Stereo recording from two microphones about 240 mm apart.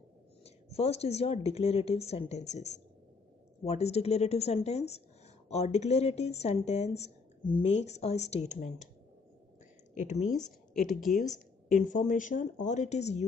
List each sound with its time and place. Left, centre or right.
0.7 s speech: left
9.9 s speech: left
10.3 s a woman's voice: centre
11.7 s speech: left